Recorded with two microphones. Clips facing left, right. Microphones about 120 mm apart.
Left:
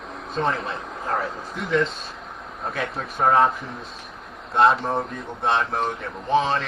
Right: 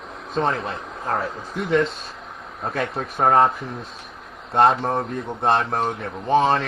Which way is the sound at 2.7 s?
45° right (ahead or behind).